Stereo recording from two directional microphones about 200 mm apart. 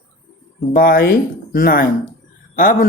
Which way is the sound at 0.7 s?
45° left (ahead or behind).